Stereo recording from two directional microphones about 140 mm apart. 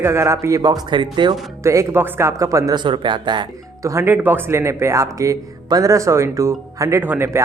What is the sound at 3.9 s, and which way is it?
Speech, 15° right (ahead or behind).